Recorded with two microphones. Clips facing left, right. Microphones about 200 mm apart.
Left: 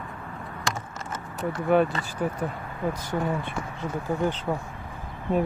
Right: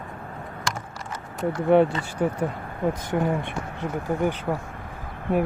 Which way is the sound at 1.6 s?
25° right (ahead or behind).